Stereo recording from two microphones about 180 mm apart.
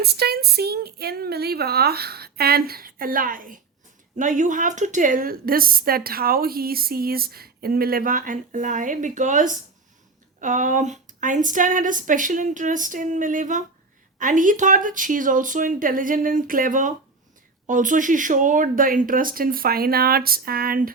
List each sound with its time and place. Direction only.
0.0 s speech: 60° right (ahead or behind)